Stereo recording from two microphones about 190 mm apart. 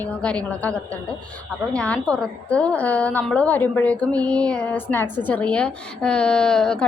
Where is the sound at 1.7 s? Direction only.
5° left (ahead or behind).